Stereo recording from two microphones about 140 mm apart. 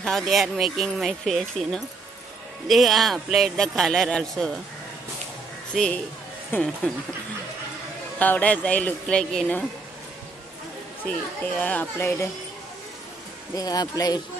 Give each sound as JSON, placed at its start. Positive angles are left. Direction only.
{"t": 0.0, "sound": "speech", "side_deg": 0}
{"t": 5.7, "sound": "speech", "side_deg": 5}
{"t": 8.2, "sound": "speech", "side_deg": 10}
{"t": 11.5, "sound": "speech", "side_deg": 10}
{"t": 13.6, "sound": "speech", "side_deg": 25}